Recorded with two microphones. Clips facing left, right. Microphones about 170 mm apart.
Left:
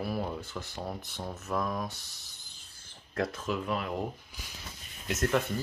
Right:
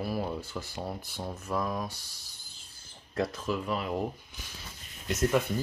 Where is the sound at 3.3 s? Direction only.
Centre (ahead or behind).